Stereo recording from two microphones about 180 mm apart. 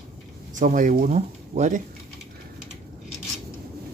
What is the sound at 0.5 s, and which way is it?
Speech, 45° right (ahead or behind).